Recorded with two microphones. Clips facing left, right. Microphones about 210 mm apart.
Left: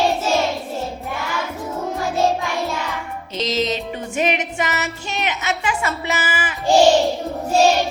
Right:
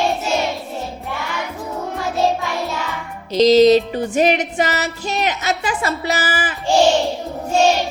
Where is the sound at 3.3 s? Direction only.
35° right (ahead or behind).